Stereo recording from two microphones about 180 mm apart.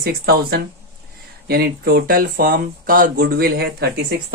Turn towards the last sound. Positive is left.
turn(degrees=-60)  # may be behind; listen again after turning